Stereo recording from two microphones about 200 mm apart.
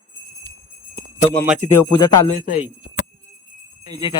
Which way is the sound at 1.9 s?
20° left (ahead or behind).